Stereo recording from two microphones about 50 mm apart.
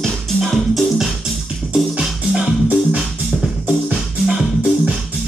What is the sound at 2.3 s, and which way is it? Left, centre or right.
Music, right.